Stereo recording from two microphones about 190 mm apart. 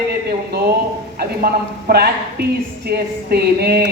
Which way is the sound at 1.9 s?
55° right (ahead or behind).